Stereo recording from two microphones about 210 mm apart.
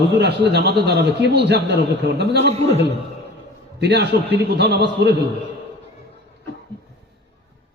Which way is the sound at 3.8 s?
50° right (ahead or behind).